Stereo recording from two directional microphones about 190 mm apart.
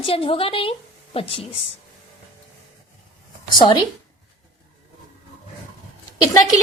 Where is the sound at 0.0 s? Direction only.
30° left (ahead or behind).